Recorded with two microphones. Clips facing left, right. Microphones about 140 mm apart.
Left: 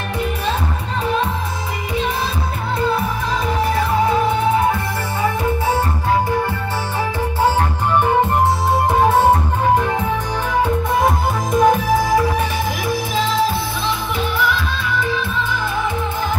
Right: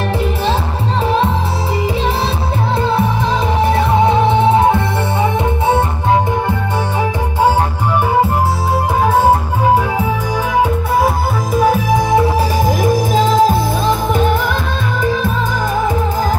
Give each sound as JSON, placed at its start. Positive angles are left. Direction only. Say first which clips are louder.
{"t": 1.0, "sound": "music", "louder": "right 4 dB", "side_deg": -30}
{"t": 2.8, "sound": "music", "louder": "right 2 dB", "side_deg": -25}
{"t": 9.0, "sound": "music", "louder": "right 2 dB", "side_deg": 0}
{"t": 11.5, "sound": "music", "louder": "even", "side_deg": -5}
{"t": 11.9, "sound": "music", "louder": "right 3 dB", "side_deg": -20}
{"t": 12.4, "sound": "music", "louder": "right 6 dB", "side_deg": -45}